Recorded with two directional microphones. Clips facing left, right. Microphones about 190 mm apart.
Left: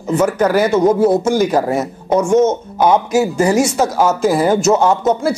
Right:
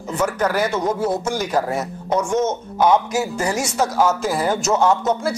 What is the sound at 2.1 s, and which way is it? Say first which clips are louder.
Speech: left 7 dB; 25° left (ahead or behind).